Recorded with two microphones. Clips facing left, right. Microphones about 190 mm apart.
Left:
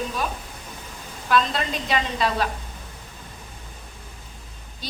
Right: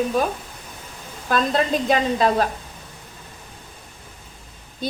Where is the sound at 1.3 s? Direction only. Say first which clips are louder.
Right 3 dB; 45° right (ahead or behind).